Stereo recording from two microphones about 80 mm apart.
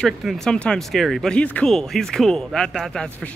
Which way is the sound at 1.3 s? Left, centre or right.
Centre.